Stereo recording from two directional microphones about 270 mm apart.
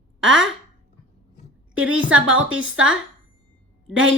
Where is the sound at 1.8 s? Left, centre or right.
Centre.